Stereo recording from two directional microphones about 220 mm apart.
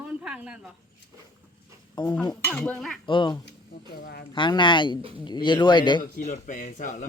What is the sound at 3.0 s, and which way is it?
Speech, 20° left (ahead or behind).